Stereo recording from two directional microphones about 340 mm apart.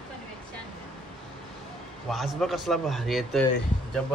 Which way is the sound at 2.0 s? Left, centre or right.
Centre.